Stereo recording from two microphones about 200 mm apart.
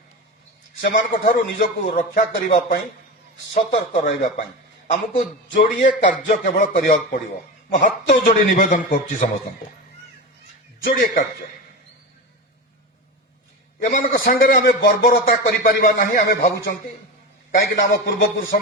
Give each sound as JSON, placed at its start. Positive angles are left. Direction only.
{"t": 0.8, "sound": "a man's voice", "side_deg": 50}
{"t": 3.5, "sound": "a man's voice", "side_deg": 35}
{"t": 10.8, "sound": "a man's voice", "side_deg": 45}
{"t": 13.8, "sound": "a man's voice", "side_deg": 45}